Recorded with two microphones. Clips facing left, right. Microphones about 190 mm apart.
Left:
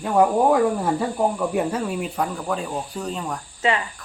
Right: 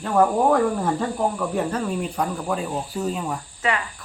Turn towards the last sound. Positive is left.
turn(degrees=25)  # may be behind; listen again after turning